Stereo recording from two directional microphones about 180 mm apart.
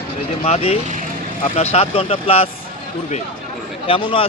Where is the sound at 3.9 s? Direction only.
30° left (ahead or behind).